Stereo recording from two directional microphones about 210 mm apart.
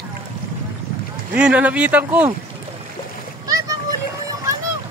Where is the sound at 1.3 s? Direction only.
5° right (ahead or behind).